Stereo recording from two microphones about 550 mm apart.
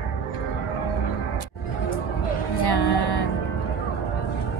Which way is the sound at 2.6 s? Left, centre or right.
Left.